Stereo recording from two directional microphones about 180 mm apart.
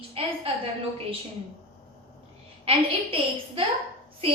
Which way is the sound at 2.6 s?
30° right (ahead or behind).